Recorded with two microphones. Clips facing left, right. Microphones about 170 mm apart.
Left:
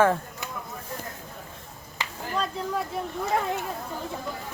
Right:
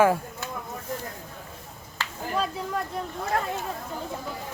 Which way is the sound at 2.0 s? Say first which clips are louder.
Even; 15° left (ahead or behind).